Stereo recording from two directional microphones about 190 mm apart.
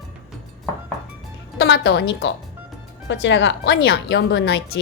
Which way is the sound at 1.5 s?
60° left (ahead or behind).